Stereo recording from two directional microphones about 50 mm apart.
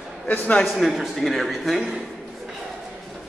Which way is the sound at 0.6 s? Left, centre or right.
Centre.